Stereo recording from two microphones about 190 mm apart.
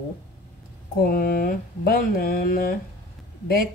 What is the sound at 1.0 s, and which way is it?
A woman's voice, 50° left (ahead or behind).